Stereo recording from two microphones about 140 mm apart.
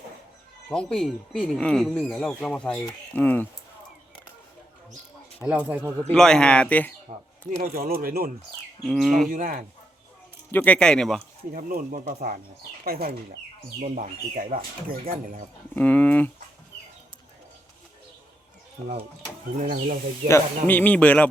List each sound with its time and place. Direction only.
0.7 s speech: 5° left (ahead or behind)
5.4 s speech: 10° right (ahead or behind)
6.1 s speech: 5° left (ahead or behind)
7.6 s speech: 90° right
8.8 s speech: centre (ahead or behind)
9.3 s speech: 75° right (ahead or behind)
10.5 s speech: 10° left (ahead or behind)
11.5 s speech: 85° right
12.8 s speech: 90° right
13.8 s speech: 65° right (ahead or behind)
15.7 s speech: 10° left (ahead or behind)
19.5 s speech: 90° right
20.2 s speech: 15° left (ahead or behind)